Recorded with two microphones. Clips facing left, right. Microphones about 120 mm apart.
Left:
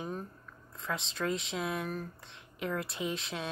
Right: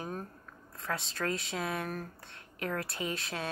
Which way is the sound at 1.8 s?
50° right (ahead or behind).